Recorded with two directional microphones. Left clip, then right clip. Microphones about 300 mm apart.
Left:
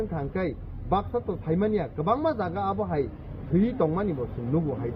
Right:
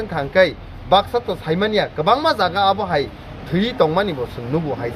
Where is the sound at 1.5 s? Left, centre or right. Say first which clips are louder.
Right 8 dB; right.